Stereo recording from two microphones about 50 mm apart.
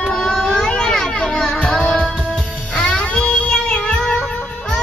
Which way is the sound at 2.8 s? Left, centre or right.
Centre.